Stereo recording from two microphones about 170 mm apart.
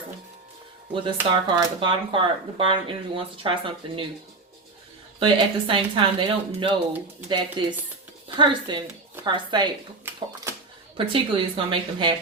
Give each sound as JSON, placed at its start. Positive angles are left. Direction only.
{"t": 0.9, "sound": "speech", "side_deg": -25}
{"t": 5.2, "sound": "speech", "side_deg": -30}
{"t": 10.9, "sound": "speech", "side_deg": -30}